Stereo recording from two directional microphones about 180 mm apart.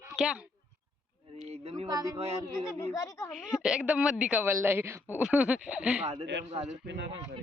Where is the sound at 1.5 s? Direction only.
35° right (ahead or behind).